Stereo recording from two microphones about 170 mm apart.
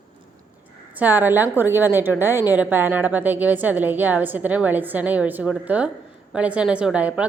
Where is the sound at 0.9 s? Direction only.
10° right (ahead or behind).